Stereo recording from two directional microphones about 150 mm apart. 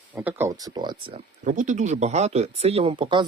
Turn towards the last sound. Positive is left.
turn(degrees=-30)  # may be behind; listen again after turning